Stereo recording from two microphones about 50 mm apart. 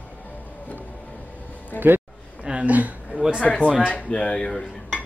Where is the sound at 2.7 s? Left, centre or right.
Right.